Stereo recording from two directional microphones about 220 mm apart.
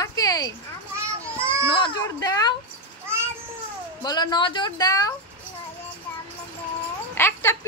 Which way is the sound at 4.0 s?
20° left (ahead or behind).